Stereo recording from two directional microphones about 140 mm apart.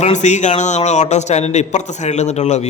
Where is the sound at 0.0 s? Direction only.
60° left (ahead or behind).